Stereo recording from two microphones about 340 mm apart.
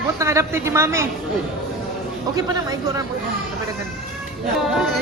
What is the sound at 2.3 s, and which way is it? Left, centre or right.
Speech, centre.